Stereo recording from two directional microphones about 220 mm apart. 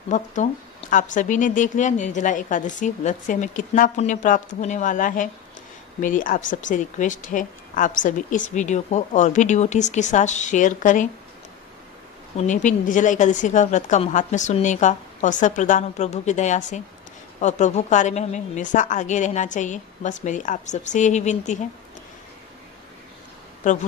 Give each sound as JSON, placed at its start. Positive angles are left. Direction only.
{"t": 0.1, "sound": "speech", "side_deg": 35}
{"t": 12.4, "sound": "speech", "side_deg": 35}
{"t": 23.6, "sound": "speech", "side_deg": 35}